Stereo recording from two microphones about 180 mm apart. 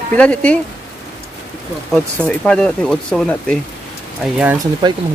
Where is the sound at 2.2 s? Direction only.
5° left (ahead or behind).